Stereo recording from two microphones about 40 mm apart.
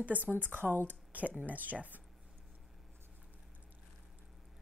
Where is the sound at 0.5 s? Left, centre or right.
Right.